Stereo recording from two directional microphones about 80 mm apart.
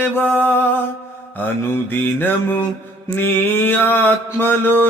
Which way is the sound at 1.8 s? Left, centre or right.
Left.